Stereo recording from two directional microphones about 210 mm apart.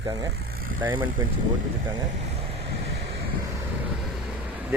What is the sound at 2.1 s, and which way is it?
Vehicle, 30° right (ahead or behind).